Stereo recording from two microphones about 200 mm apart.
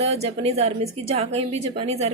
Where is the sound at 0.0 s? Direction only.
30° right (ahead or behind).